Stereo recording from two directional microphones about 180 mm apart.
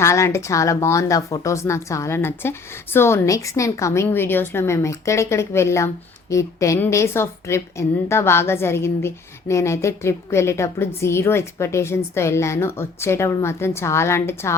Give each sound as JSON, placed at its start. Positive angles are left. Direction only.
{"t": 0.0, "sound": "a woman's voice", "side_deg": 15}